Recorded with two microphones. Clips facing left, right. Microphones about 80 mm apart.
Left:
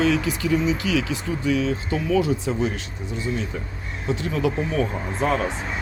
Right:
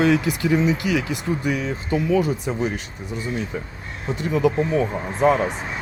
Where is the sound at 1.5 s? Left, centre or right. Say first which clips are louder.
Left 6 dB; left.